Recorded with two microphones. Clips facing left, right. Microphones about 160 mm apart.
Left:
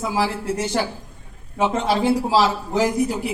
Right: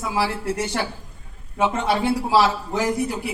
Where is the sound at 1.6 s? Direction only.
20° left (ahead or behind).